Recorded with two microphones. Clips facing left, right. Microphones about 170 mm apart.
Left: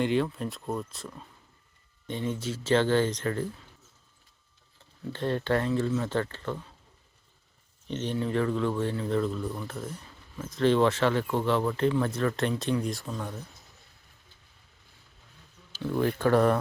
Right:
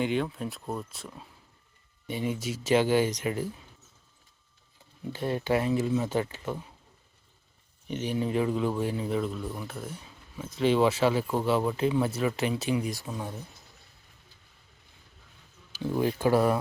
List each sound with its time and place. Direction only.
0.0 s speech: centre (ahead or behind)
5.0 s speech: 10° right (ahead or behind)
7.9 s speech: 10° right (ahead or behind)
15.7 s speech: 15° right (ahead or behind)